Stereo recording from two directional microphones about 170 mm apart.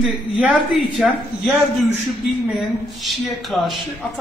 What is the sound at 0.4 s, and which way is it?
Speech, 5° right (ahead or behind).